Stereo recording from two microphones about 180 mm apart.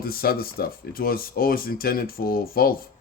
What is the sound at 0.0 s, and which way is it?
Speech, 55° left (ahead or behind).